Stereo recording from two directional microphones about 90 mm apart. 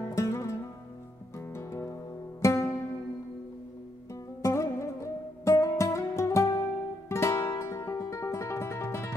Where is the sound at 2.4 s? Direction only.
30° left (ahead or behind).